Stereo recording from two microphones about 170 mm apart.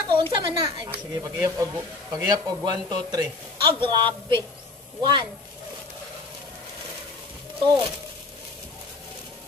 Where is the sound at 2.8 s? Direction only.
25° right (ahead or behind).